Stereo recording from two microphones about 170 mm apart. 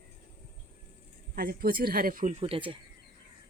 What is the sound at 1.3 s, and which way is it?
Speech, 60° right (ahead or behind).